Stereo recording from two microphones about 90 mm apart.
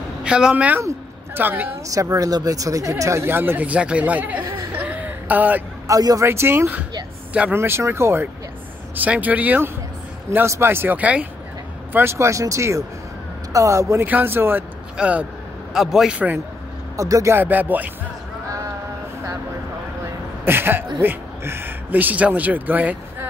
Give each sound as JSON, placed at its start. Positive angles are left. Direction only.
{"t": 0.2, "sound": "speech", "side_deg": -10}
{"t": 0.7, "sound": "a woman's voice", "side_deg": -30}
{"t": 1.9, "sound": "speech", "side_deg": -40}
{"t": 5.9, "sound": "speech", "side_deg": -40}
{"t": 6.2, "sound": "speech", "side_deg": -30}
{"t": 8.9, "sound": "speech", "side_deg": -20}
{"t": 10.3, "sound": "speech", "side_deg": -30}
{"t": 11.9, "sound": "speech", "side_deg": -30}
{"t": 14.0, "sound": "speech", "side_deg": -20}
{"t": 15.0, "sound": "speech", "side_deg": -15}
{"t": 15.7, "sound": "a man's voice", "side_deg": -5}
{"t": 16.9, "sound": "speech", "side_deg": -35}
{"t": 17.4, "sound": "speech", "side_deg": -20}
{"t": 20.4, "sound": "speech", "side_deg": -25}